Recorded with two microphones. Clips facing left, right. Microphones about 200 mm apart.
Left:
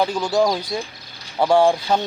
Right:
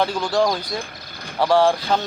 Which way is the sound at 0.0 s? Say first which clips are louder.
Left 1 dB; 10° left (ahead or behind).